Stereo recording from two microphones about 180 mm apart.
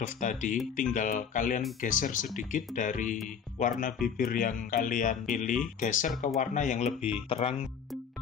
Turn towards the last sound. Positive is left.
turn(degrees=35)  # may be behind; listen again after turning